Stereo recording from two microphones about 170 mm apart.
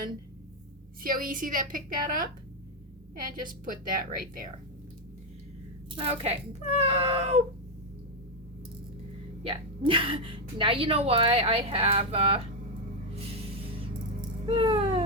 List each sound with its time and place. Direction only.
1.0 s a woman's voice: 55° right (ahead or behind)
6.0 s a woman's voice: 35° right (ahead or behind)
9.4 s a woman's voice: 30° right (ahead or behind)
13.1 s music: 35° right (ahead or behind)